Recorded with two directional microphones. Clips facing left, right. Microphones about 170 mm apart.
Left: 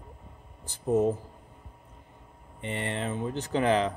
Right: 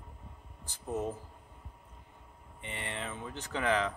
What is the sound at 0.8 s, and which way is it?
Speech, 25° left (ahead or behind).